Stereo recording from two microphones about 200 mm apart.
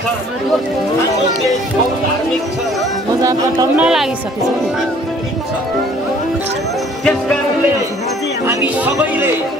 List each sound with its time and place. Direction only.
3.2 s speech: 20° right (ahead or behind)
3.7 s a woman's voice: 5° right (ahead or behind)